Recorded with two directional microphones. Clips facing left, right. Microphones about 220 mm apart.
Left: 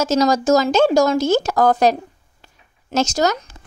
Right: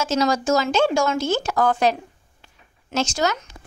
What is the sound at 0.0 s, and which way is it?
Speech, 40° left (ahead or behind).